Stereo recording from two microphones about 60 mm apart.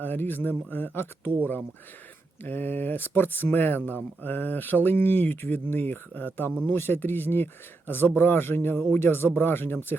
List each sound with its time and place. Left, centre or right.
0.0 s speech: left
2.4 s speech: left